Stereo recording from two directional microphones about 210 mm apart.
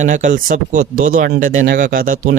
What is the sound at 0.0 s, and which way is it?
Speech, 35° right (ahead or behind).